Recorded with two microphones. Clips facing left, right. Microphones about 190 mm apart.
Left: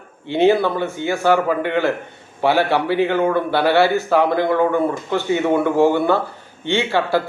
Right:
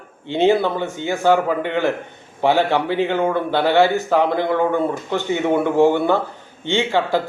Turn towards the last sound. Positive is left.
turn(degrees=-15)  # may be behind; listen again after turning